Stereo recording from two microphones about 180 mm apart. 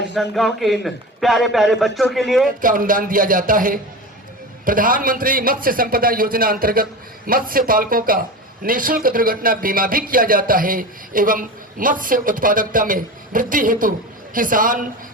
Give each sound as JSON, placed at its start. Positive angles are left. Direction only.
{"t": 0.1, "sound": "a man's voice", "side_deg": 0}
{"t": 2.6, "sound": "speech", "side_deg": -50}